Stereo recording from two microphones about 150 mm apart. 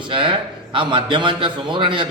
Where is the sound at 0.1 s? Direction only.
35° right (ahead or behind).